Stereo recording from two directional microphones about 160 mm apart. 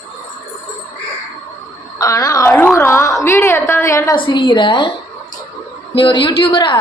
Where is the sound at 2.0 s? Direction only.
20° left (ahead or behind).